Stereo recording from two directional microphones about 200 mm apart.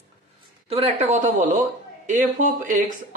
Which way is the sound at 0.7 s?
30° right (ahead or behind).